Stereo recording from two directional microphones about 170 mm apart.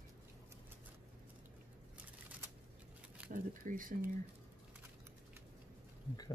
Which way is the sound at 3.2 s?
50° right (ahead or behind).